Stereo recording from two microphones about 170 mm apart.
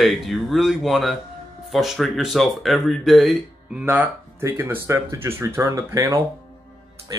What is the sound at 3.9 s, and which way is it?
Speech, 10° right (ahead or behind).